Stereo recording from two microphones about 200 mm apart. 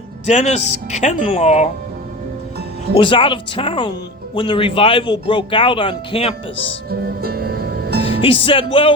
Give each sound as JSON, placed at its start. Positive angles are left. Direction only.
{"t": 0.3, "sound": "speech", "side_deg": 35}
{"t": 3.0, "sound": "speech", "side_deg": 25}
{"t": 6.9, "sound": "music", "side_deg": -50}
{"t": 8.0, "sound": "speech", "side_deg": 25}